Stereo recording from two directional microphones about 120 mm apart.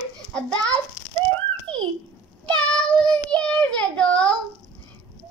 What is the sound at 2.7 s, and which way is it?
Child singing, 10° left (ahead or behind).